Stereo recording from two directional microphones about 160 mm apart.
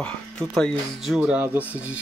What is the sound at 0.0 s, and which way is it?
Speech, 5° left (ahead or behind).